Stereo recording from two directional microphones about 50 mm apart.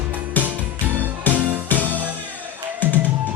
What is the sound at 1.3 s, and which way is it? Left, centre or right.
Music, left.